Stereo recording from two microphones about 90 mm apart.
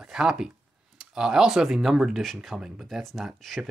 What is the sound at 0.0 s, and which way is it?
Speech, 5° right (ahead or behind).